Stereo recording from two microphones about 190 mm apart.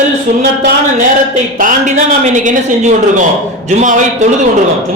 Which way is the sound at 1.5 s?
45° right (ahead or behind).